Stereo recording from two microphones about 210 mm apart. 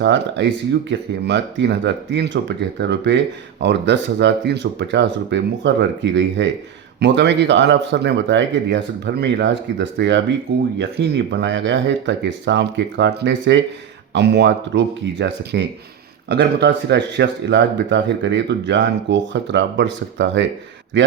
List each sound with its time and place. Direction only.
0.0 s speech: 55° right (ahead or behind)